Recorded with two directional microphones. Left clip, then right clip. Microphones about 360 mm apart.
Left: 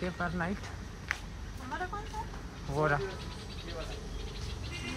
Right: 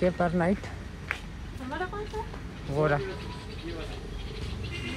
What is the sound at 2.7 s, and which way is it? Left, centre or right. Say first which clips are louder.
Speech: right 4 dB; centre.